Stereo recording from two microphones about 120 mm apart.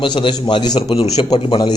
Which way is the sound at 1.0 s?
60° left (ahead or behind).